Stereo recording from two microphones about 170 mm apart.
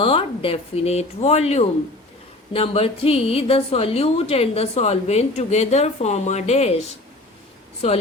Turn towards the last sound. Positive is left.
turn(degrees=35)  # may be behind; listen again after turning